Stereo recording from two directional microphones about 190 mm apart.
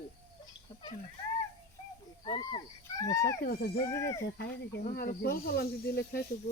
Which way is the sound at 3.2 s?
55° left (ahead or behind).